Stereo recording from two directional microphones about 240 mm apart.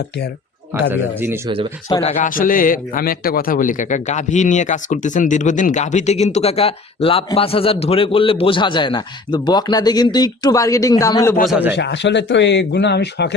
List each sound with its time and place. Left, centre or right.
0.7 s speech: centre
1.9 s a man's voice: left
11.4 s speech: centre
11.8 s speech: left